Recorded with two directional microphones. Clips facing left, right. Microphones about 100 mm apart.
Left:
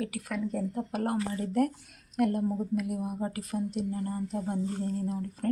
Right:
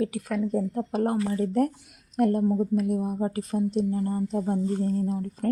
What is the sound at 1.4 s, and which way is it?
Speech, 35° right (ahead or behind).